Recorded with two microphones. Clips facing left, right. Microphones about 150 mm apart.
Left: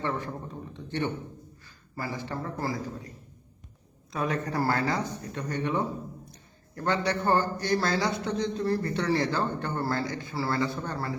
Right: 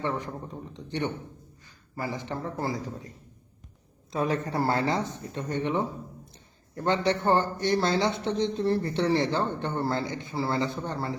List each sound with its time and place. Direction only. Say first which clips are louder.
0.0 s a man's voice: right 1 dB; 15° right (ahead or behind)
4.1 s speech: right 2 dB; 25° right (ahead or behind)